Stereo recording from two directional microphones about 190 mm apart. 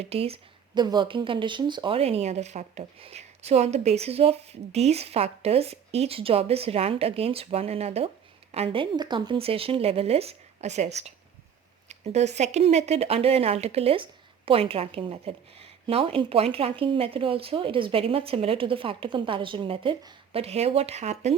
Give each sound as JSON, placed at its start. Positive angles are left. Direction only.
{"t": 0.0, "sound": "speech", "side_deg": -30}